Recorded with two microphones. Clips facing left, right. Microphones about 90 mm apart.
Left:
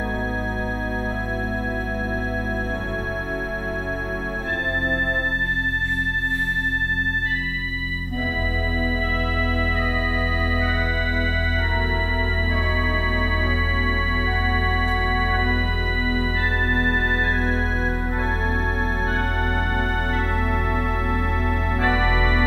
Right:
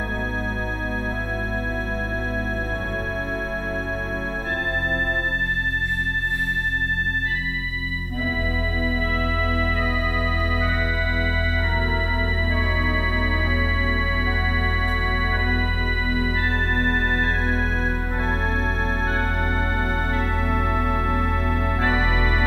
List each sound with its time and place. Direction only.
8.7 s music: 35° left (ahead or behind)
10.1 s music: 30° left (ahead or behind)
11.8 s music: 30° right (ahead or behind)
12.8 s music: 30° left (ahead or behind)
19.4 s music: 30° left (ahead or behind)